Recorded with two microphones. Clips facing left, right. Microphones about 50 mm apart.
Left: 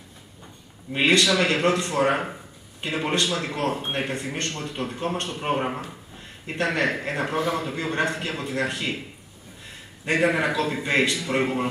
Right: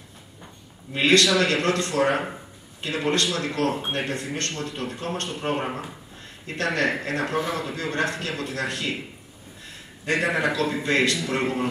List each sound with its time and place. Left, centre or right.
0.9 s a man's voice: centre
7.4 s a man's voice: centre
7.7 s a man's voice: centre
10.0 s a man's voice: centre